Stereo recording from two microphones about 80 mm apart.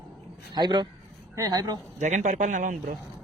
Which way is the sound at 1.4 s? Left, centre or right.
Right.